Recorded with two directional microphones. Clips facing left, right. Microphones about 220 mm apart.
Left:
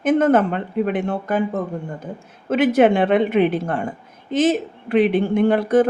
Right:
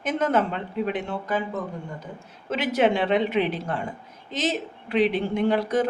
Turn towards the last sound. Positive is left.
turn(degrees=50)  # may be behind; listen again after turning